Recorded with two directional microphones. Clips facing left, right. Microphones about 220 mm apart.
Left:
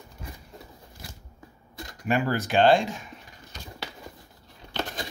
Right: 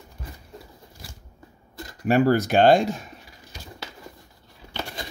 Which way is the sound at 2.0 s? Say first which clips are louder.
Right 7 dB; 40° right (ahead or behind).